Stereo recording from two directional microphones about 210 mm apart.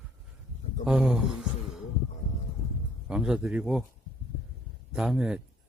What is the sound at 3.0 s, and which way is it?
Speech, 5° right (ahead or behind).